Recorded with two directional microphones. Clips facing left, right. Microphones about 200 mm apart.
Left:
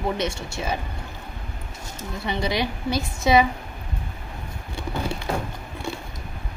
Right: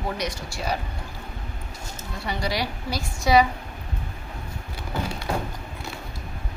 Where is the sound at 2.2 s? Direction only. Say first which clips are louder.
Left 3 dB; 20° left (ahead or behind).